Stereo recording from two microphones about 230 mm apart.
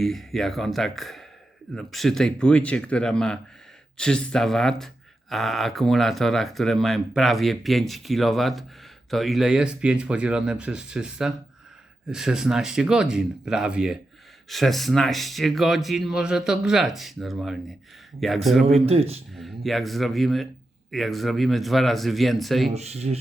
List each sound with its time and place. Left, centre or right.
0.0 s speech: centre
18.6 s speech: right
19.4 s speech: centre
22.7 s speech: right